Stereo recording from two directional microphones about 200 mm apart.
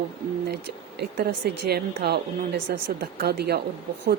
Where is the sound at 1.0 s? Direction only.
55° right (ahead or behind).